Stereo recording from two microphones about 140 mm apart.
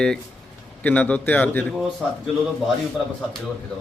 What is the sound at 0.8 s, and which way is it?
Speech, 10° left (ahead or behind).